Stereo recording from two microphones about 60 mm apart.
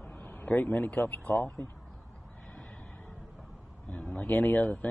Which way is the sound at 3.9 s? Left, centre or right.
Left.